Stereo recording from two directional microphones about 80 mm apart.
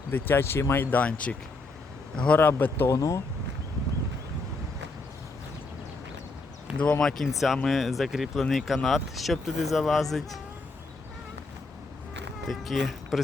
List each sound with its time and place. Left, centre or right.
0.1 s speech: left
2.9 s speech: left
6.7 s speech: centre
7.0 s speech: centre
12.5 s speech: centre